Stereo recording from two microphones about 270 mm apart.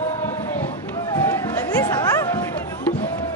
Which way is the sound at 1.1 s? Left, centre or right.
Centre.